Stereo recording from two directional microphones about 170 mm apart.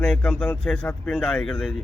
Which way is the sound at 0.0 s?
5° left (ahead or behind).